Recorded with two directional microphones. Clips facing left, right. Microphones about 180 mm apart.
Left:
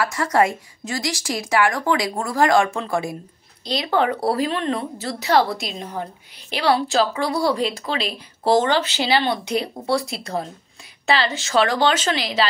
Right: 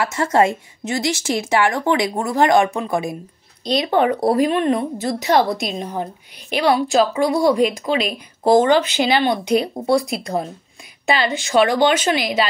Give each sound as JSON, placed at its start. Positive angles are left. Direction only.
{"t": 0.0, "sound": "a woman's voice", "side_deg": -25}